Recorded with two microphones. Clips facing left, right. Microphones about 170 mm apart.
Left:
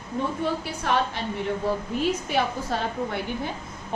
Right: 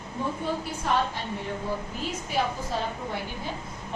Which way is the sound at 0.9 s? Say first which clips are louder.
Left 2 dB; 75° left (ahead or behind).